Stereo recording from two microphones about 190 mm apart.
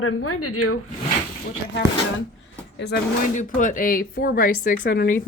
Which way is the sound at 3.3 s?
40° left (ahead or behind).